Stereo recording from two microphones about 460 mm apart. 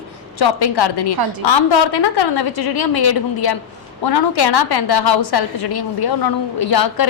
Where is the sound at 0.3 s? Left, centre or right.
Left.